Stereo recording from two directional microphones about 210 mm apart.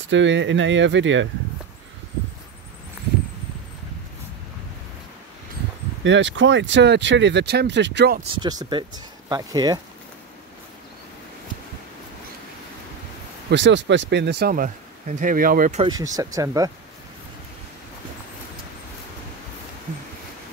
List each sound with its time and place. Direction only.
0.1 s speech: 60° right (ahead or behind)
6.0 s speech: 60° right (ahead or behind)
8.4 s speech: 20° right (ahead or behind)
13.5 s speech: 60° right (ahead or behind); by 15.8 s 40° right (ahead or behind)
15.8 s speech: 15° right (ahead or behind)